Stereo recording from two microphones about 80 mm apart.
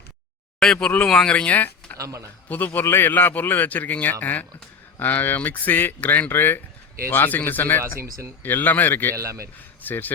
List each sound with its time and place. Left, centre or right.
0.6 s speech: centre
2.0 s speech: right
2.5 s a man's voice: left
9.1 s speech: right
9.8 s speech: left